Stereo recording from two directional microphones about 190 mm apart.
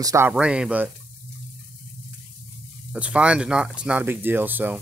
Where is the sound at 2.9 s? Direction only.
5° right (ahead or behind).